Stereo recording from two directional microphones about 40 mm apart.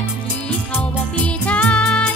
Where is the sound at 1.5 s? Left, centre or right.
Left.